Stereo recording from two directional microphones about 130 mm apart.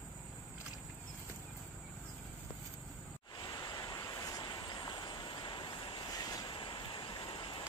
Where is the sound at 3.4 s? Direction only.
30° left (ahead or behind).